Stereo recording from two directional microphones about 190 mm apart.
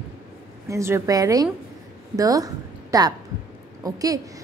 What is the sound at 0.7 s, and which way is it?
A woman's voice, 15° right (ahead or behind).